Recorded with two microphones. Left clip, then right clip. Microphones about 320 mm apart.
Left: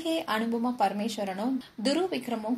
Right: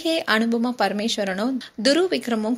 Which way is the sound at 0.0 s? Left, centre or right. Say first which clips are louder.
Right 8 dB; right.